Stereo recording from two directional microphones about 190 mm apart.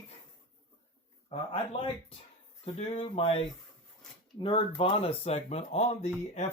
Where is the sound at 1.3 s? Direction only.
30° left (ahead or behind).